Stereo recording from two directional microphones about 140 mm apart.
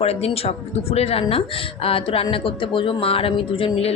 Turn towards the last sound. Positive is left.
turn(degrees=40)  # may be behind; listen again after turning